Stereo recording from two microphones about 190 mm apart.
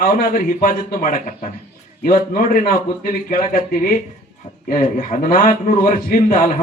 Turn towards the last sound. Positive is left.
turn(degrees=50)  # may be behind; listen again after turning